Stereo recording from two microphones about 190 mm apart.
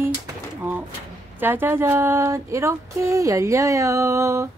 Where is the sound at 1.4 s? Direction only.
10° right (ahead or behind).